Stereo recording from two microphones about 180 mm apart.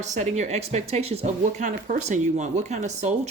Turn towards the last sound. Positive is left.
turn(degrees=-40)  # may be behind; listen again after turning